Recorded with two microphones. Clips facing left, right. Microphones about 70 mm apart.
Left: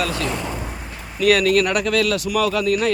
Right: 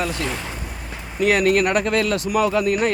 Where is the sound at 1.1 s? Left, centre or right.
Right.